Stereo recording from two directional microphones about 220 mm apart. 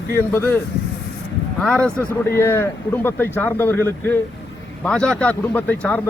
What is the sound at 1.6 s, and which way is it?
A man's voice, 5° left (ahead or behind).